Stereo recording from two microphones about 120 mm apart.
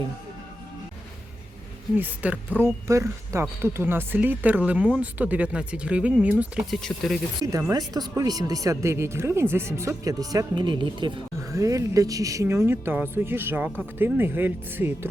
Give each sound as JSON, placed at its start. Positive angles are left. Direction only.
{"t": 2.0, "sound": "speech", "side_deg": -15}
{"t": 6.7, "sound": "speech", "side_deg": 5}
{"t": 7.7, "sound": "speech", "side_deg": -35}
{"t": 11.3, "sound": "speech", "side_deg": -25}